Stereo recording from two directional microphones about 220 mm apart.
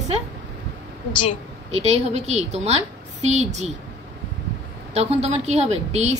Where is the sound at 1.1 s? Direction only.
20° left (ahead or behind).